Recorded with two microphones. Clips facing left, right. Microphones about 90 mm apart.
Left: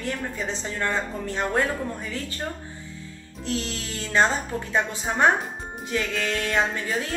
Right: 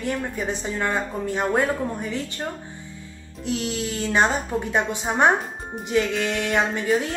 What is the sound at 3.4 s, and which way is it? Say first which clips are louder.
A woman's voice: right 4 dB; 15° right (ahead or behind).